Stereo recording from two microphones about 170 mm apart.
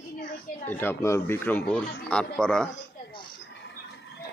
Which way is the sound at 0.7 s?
10° left (ahead or behind).